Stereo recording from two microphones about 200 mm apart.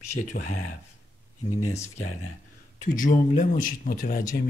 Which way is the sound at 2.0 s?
90° left.